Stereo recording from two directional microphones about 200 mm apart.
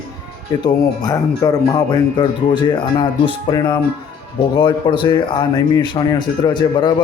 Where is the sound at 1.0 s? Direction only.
20° left (ahead or behind).